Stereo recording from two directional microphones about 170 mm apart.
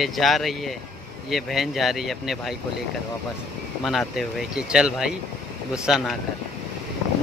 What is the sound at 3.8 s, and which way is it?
Speech, centre (ahead or behind).